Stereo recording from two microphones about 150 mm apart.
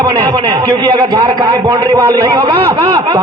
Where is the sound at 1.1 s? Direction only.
30° right (ahead or behind).